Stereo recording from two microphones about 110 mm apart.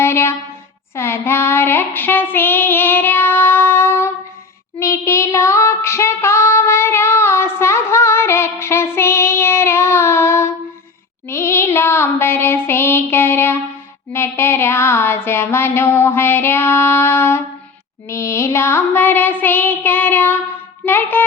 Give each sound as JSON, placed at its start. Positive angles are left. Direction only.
{"t": 0.0, "sound": "a sound", "side_deg": 25}
{"t": 0.9, "sound": "child singing", "side_deg": 25}
{"t": 14.1, "sound": "music", "side_deg": 20}